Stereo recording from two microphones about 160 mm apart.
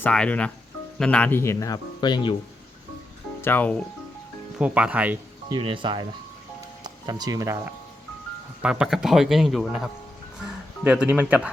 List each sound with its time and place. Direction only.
0.0 s speech: 10° left (ahead or behind); by 2.3 s 30° left (ahead or behind)
3.4 s speech: 10° left (ahead or behind)
4.5 s speech: 10° right (ahead or behind)
5.5 s speech: 30° right (ahead or behind)
8.6 s speech: 5° right (ahead or behind)